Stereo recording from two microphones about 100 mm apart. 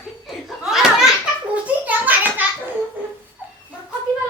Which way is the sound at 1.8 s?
15° right (ahead or behind).